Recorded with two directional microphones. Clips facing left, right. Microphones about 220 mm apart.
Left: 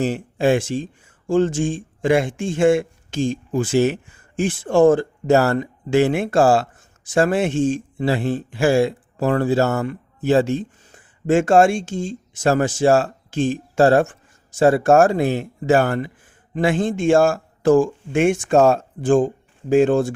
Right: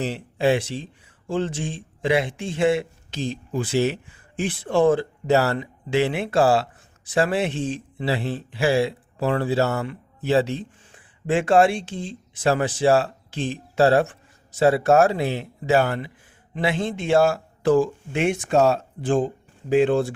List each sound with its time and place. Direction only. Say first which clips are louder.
0.0 s a man's voice: left 3 dB; 50° left (ahead or behind)